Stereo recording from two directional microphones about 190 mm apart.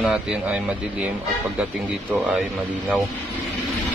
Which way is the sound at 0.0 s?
5° right (ahead or behind).